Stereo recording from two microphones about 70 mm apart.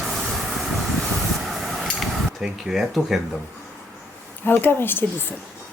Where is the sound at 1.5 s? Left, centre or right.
Centre.